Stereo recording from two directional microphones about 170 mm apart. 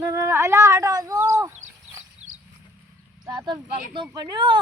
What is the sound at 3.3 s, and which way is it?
Speech, 25° right (ahead or behind).